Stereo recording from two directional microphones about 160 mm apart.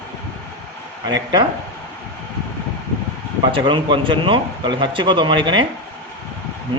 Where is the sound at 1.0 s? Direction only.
25° right (ahead or behind).